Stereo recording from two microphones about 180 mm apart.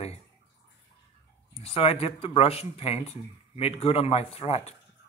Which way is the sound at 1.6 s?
35° left (ahead or behind).